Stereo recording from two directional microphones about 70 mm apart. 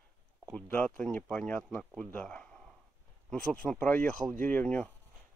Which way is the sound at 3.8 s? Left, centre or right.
Left.